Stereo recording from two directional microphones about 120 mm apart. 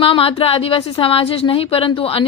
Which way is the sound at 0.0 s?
50° left (ahead or behind).